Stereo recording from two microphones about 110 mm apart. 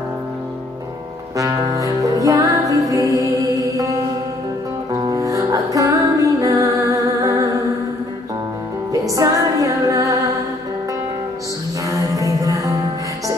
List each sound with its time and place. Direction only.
1.3 s music: 30° right (ahead or behind)
8.9 s music: 30° right (ahead or behind)
11.9 s music: 30° right (ahead or behind)